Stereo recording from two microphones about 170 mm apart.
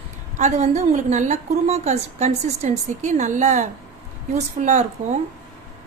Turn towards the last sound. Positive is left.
turn(degrees=-45)  # may be behind; listen again after turning